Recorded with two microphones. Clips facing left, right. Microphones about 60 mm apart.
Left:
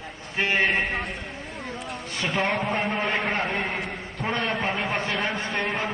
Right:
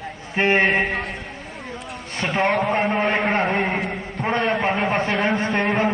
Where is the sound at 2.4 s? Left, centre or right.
Right.